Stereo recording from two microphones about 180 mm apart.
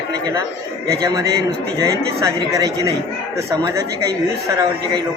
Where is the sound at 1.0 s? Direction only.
20° right (ahead or behind).